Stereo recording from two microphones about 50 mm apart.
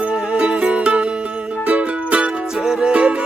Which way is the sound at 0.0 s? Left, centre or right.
Centre.